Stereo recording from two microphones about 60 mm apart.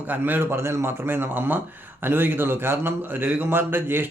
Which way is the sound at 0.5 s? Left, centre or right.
Right.